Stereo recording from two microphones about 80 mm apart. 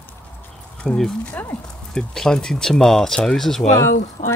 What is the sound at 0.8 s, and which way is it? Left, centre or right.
Speech, centre.